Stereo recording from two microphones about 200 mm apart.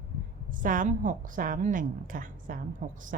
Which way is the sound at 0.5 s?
40° right (ahead or behind).